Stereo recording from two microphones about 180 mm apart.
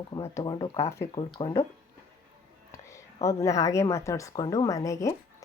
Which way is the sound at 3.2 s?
15° left (ahead or behind).